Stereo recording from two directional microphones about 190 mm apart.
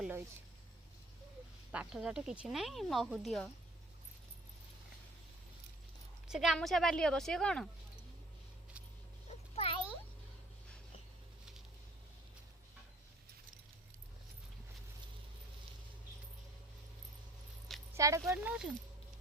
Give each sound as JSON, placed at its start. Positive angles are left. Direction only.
{"t": 1.7, "sound": "speech", "side_deg": -5}
{"t": 6.2, "sound": "speech", "side_deg": 0}
{"t": 9.6, "sound": "a sound", "side_deg": 30}
{"t": 17.9, "sound": "speech", "side_deg": -15}